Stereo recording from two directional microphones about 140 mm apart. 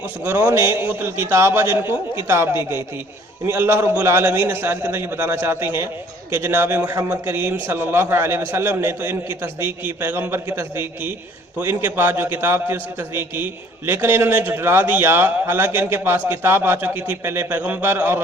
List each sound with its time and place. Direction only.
0.3 s a man's voice: 15° right (ahead or behind)